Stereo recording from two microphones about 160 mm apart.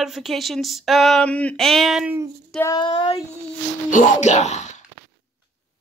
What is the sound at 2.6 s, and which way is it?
Speech, 25° left (ahead or behind).